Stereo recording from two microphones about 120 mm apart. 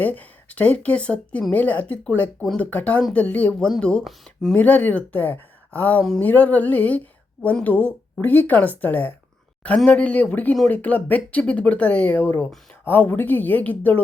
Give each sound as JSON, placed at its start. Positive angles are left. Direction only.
{"t": 0.0, "sound": "speech", "side_deg": 15}